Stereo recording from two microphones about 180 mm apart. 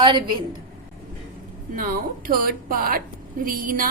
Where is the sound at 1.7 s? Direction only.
55° right (ahead or behind).